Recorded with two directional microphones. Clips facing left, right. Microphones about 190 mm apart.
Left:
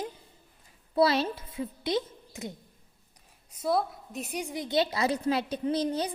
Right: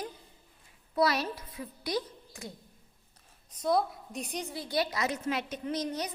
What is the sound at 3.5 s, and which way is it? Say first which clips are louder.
A woman's voice: even; 5° left (ahead or behind).